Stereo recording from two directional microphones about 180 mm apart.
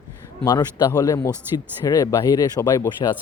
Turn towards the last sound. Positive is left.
turn(degrees=20)  # may be behind; listen again after turning